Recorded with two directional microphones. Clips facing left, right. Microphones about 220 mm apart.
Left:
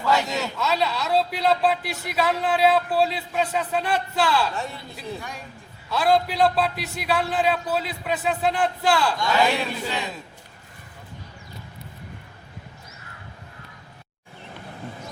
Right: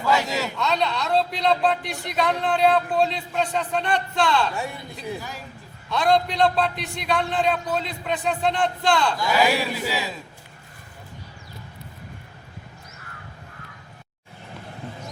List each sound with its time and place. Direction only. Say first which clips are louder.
0.0 s speech: even; centre (ahead or behind)
4.5 s speech: right 1 dB; 10° right (ahead or behind)